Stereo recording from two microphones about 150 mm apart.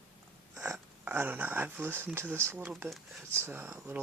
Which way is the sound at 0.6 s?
15° right (ahead or behind).